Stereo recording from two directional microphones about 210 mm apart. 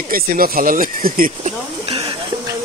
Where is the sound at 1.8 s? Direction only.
25° right (ahead or behind).